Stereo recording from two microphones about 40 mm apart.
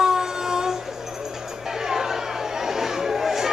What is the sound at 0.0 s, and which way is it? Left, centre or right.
Train, centre.